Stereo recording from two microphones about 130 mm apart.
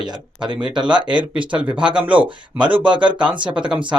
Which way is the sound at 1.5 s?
10° right (ahead or behind).